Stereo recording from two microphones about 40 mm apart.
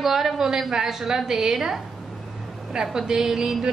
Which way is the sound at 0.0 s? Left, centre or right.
Centre.